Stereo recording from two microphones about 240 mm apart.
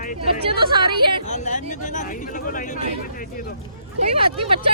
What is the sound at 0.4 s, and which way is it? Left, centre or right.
Speech, centre.